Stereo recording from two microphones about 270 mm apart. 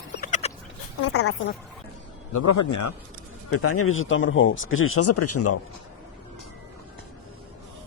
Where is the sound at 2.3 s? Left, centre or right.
Left.